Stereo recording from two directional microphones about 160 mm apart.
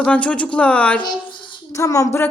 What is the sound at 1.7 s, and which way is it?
Speech, 20° left (ahead or behind).